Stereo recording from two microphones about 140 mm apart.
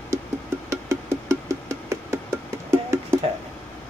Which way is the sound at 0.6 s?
20° right (ahead or behind).